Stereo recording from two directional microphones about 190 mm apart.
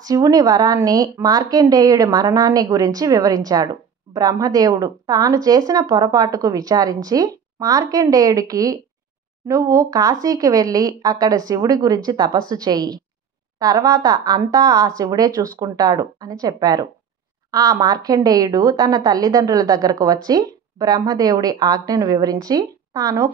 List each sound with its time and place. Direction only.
0.0 s speech: 20° right (ahead or behind)